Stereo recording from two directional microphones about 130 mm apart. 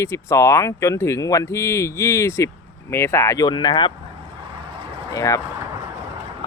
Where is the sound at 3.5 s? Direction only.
35° left (ahead or behind).